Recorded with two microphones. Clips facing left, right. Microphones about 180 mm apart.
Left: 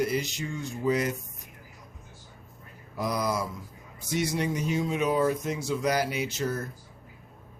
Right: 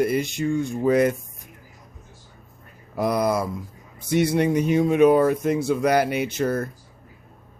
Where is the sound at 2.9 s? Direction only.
60° right (ahead or behind).